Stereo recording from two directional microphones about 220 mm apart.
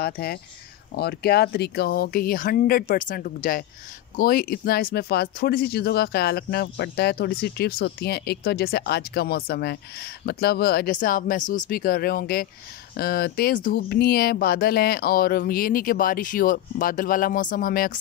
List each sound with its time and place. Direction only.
0.0 s speech: 45° left (ahead or behind)